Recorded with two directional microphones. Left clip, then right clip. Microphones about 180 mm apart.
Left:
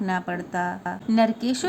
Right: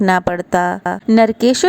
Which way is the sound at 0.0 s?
55° right (ahead or behind).